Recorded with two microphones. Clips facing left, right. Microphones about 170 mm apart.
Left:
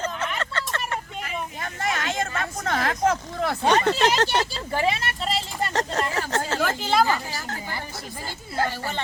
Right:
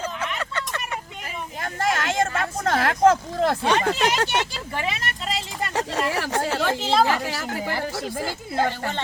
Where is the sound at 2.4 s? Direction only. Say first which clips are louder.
Right 3 dB; 50° right (ahead or behind).